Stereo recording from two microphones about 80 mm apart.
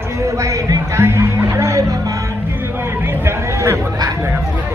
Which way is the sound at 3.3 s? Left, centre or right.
Right.